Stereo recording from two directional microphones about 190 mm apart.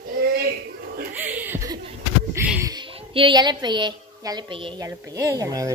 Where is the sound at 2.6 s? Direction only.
25° right (ahead or behind).